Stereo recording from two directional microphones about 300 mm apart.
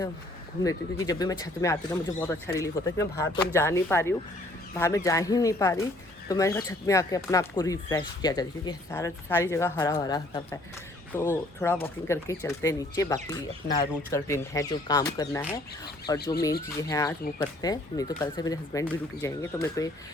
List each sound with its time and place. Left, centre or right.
0.6 s speech: centre
13.6 s speech: left
14.1 s speech: centre